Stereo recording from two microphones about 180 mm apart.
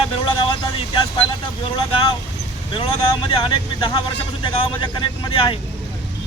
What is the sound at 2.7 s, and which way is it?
Speech, 30° left (ahead or behind).